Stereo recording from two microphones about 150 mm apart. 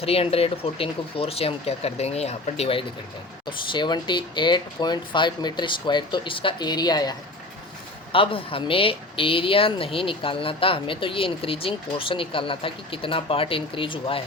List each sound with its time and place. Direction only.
0.0 s speech: 40° left (ahead or behind)
3.7 s speech: 30° left (ahead or behind)
8.1 s speech: 35° left (ahead or behind)